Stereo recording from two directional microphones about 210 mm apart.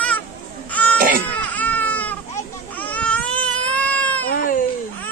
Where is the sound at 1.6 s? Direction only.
10° left (ahead or behind).